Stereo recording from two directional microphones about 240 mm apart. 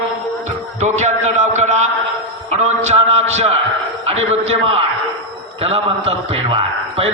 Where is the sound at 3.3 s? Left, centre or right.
Right.